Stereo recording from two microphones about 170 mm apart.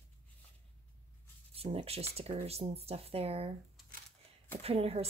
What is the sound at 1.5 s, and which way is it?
A woman's voice, 35° right (ahead or behind).